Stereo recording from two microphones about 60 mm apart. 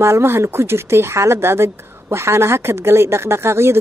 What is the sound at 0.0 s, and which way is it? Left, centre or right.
Speech, right.